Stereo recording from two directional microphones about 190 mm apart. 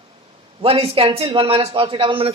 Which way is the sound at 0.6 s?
30° right (ahead or behind).